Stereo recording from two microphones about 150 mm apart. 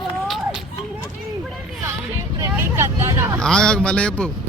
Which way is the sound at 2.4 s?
15° right (ahead or behind).